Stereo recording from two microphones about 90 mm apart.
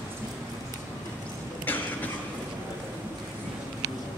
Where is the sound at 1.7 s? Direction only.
20° left (ahead or behind).